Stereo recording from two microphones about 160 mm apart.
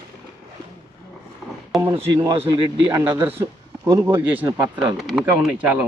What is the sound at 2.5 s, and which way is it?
Speech, 25° right (ahead or behind).